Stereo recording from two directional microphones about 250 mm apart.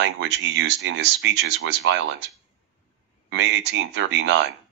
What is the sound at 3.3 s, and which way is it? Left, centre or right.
Speech, right.